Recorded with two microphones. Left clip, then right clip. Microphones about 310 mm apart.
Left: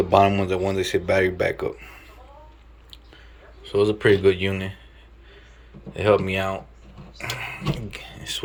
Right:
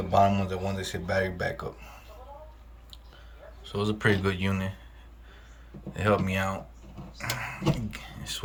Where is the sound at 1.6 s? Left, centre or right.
Centre.